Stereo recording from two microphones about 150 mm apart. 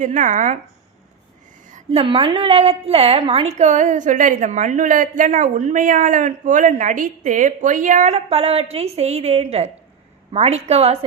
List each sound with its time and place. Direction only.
0.0 s a woman's voice: 55° right (ahead or behind)
1.9 s a woman's voice: 35° right (ahead or behind)
3.6 s a woman's voice: 55° right (ahead or behind)